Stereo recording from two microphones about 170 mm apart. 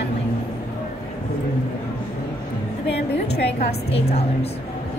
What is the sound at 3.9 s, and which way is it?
Speech, 35° left (ahead or behind).